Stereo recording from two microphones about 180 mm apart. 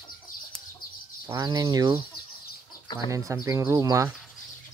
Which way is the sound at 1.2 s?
20° right (ahead or behind).